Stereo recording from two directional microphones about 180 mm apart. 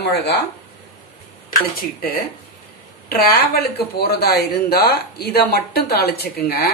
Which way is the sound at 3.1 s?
60° left (ahead or behind).